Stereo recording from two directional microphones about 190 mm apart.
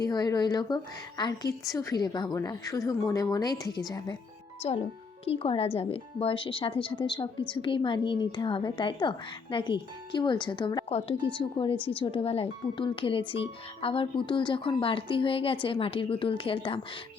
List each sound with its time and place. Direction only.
0.0 s speech: 20° left (ahead or behind)
4.6 s speech: 30° left (ahead or behind)